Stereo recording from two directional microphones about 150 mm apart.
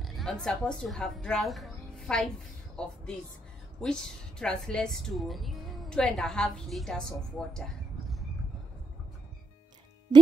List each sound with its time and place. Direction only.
0.0 s a woman's voice: centre (ahead or behind)